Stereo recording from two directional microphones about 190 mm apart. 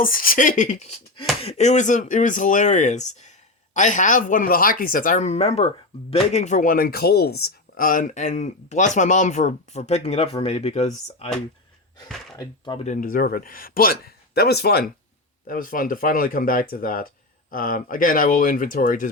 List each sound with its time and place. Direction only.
0.0 s speech: 50° left (ahead or behind)
12.4 s speech: 25° left (ahead or behind)
12.9 s speech: 45° left (ahead or behind)